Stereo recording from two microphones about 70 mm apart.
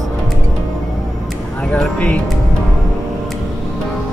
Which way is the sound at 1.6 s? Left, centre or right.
Centre.